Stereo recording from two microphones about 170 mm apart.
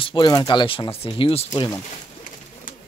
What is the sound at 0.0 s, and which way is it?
Speech, 25° left (ahead or behind).